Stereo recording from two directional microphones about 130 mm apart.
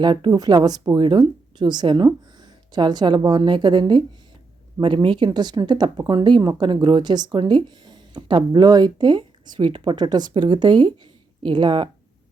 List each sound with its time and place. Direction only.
0.0 s speech: 35° right (ahead or behind)
5.0 s speech: 40° right (ahead or behind)